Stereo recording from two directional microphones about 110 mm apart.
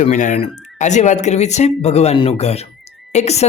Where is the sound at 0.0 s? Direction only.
80° left.